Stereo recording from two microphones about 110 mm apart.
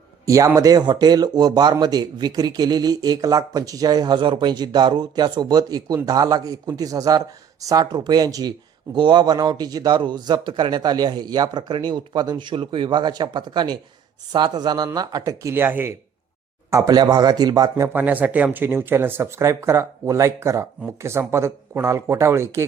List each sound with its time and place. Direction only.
0.3 s a man's voice: 30° right (ahead or behind)
16.6 s speech: 30° right (ahead or behind)
17.8 s speech: 15° right (ahead or behind)